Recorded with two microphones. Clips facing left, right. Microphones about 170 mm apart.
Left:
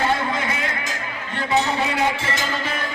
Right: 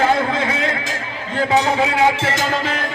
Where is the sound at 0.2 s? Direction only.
90° right.